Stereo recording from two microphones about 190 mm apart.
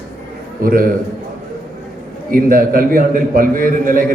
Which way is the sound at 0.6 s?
50° right (ahead or behind).